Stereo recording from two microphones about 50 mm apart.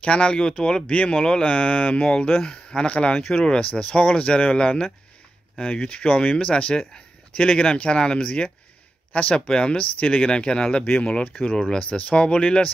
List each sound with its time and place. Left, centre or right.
0.0 s speech: left